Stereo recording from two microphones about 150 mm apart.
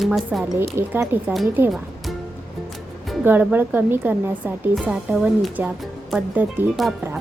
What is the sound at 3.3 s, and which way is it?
A woman's voice, 10° right (ahead or behind).